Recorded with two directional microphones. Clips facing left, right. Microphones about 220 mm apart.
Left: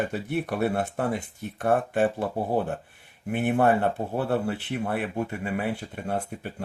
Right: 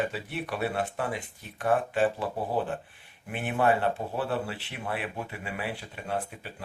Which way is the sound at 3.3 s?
50° left (ahead or behind).